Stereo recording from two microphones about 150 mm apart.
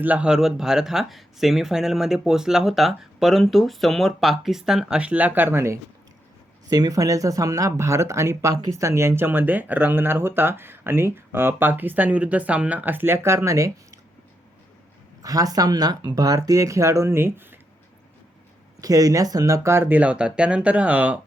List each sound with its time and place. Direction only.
0.0 s speech: 10° right (ahead or behind)
15.2 s speech: 25° right (ahead or behind)
18.8 s speech: 25° right (ahead or behind)